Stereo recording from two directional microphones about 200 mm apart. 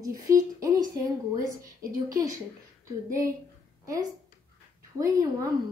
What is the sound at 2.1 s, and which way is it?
Speech, 15° right (ahead or behind).